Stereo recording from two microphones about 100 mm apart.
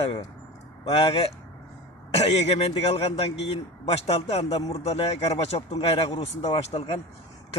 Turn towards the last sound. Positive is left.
turn(degrees=85)